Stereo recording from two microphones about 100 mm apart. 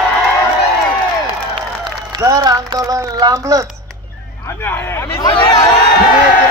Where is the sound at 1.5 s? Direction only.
55° right (ahead or behind).